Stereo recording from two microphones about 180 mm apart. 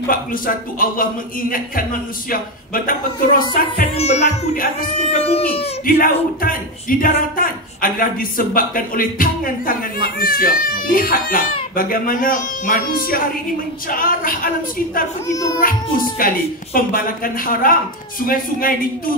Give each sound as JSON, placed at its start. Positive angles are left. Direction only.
{"t": 0.1, "sound": "speech", "side_deg": 50}
{"t": 3.9, "sound": "music", "side_deg": 35}
{"t": 5.2, "sound": "music", "side_deg": 35}
{"t": 5.9, "sound": "speech", "side_deg": 50}
{"t": 15.2, "sound": "a child's voice", "side_deg": 20}
{"t": 16.2, "sound": "speech", "side_deg": 50}